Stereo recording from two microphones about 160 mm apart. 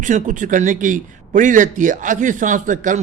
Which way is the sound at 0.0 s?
55° right (ahead or behind).